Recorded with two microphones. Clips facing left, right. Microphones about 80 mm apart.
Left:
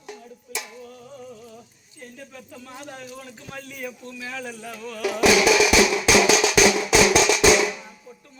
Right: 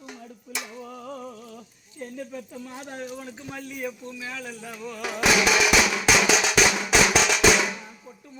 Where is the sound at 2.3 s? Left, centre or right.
Right.